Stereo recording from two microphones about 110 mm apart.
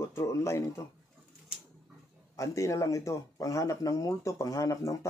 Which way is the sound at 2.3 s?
30° left (ahead or behind).